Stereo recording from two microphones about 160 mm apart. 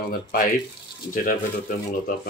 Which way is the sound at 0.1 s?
70° left (ahead or behind).